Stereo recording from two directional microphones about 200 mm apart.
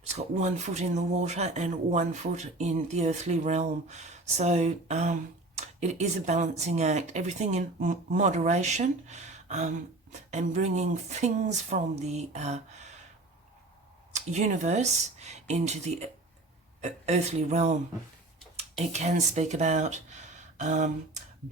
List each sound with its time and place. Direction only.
0.1 s speech: 35° right (ahead or behind)
14.1 s speech: 35° right (ahead or behind)